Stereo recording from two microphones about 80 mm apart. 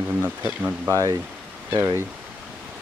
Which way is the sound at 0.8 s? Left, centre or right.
Right.